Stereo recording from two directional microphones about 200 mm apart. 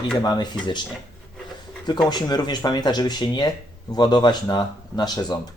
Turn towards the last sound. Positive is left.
turn(degrees=20)  # may be behind; listen again after turning